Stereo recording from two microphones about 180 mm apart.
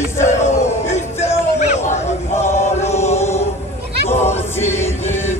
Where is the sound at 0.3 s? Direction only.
40° left (ahead or behind).